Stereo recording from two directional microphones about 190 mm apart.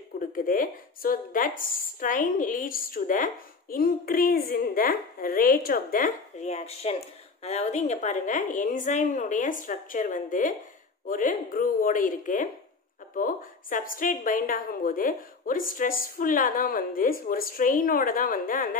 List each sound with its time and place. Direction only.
0.4 s a woman's voice: 45° left (ahead or behind)